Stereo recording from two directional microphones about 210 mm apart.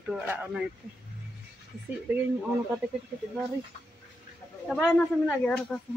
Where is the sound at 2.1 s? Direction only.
5° right (ahead or behind).